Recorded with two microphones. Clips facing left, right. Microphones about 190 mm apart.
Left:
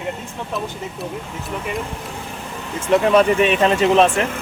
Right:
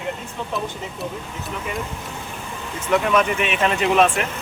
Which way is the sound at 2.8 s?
30° left (ahead or behind).